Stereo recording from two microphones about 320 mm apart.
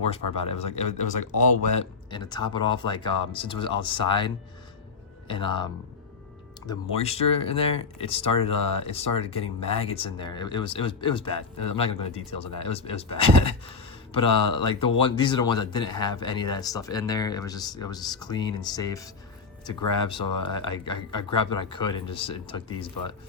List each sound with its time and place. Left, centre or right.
0.1 s speech: centre
5.3 s speech: centre
6.7 s speech: centre